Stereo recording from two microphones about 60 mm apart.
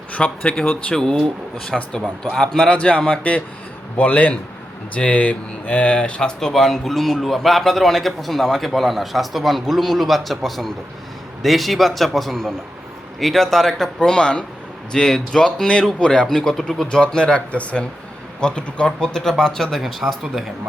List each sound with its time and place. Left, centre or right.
0.1 s speech: left
2.7 s speech: left; by 20.4 s centre